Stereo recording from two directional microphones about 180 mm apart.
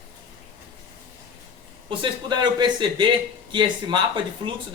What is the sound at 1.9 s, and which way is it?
Speech, 25° right (ahead or behind).